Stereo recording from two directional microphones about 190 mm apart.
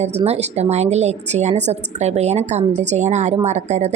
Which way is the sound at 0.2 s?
35° right (ahead or behind).